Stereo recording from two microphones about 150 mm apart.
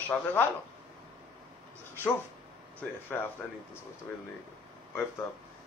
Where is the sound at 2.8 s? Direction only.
15° left (ahead or behind).